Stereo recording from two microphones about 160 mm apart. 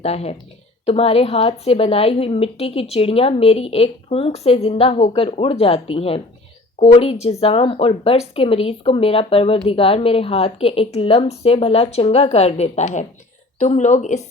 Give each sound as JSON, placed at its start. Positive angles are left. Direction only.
{"t": 0.0, "sound": "speech", "side_deg": 40}